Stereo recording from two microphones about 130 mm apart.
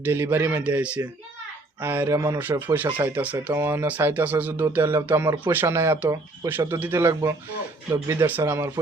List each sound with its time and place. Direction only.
0.0 s speech: 15° right (ahead or behind)
6.7 s speech: 15° right (ahead or behind)